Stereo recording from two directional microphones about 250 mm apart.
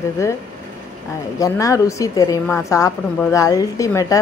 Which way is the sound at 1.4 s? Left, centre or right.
Centre.